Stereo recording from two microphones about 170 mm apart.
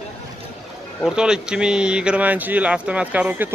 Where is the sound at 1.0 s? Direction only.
5° right (ahead or behind).